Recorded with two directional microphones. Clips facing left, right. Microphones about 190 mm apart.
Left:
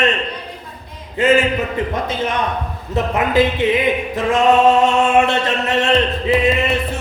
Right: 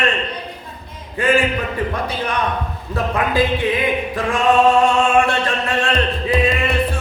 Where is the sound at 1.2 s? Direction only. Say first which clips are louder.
Left 3 dB; 20° left (ahead or behind).